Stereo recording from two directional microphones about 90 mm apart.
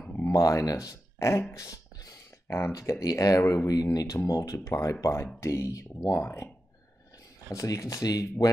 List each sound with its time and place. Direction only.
0.3 s speech: 35° left (ahead or behind)
2.4 s speech: 30° left (ahead or behind)
7.5 s speech: 40° left (ahead or behind)